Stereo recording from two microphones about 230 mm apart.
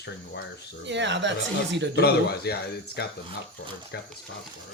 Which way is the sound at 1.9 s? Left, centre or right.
Left.